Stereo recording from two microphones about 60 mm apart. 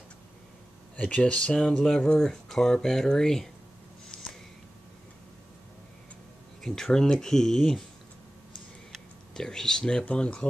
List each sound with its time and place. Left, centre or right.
0.9 s speech: centre
6.6 s speech: centre
8.9 s speech: centre